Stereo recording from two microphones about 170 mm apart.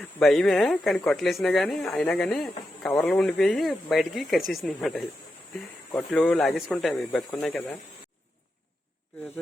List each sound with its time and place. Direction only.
0.0 s speech: centre (ahead or behind)
6.1 s speech: 5° left (ahead or behind)